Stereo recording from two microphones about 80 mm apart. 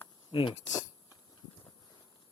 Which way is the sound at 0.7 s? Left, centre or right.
Left.